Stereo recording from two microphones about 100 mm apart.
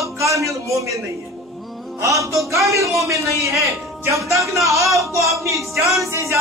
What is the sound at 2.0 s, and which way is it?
A man's voice, 30° right (ahead or behind).